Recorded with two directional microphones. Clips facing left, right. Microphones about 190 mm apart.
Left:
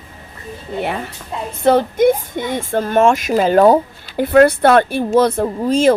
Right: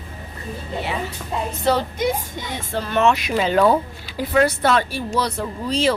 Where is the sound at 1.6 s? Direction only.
50° left (ahead or behind).